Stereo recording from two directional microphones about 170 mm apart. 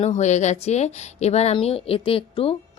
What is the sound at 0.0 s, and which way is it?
Speech, 40° left (ahead or behind).